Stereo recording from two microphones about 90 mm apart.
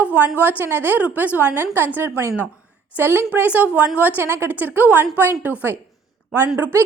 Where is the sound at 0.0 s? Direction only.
20° right (ahead or behind).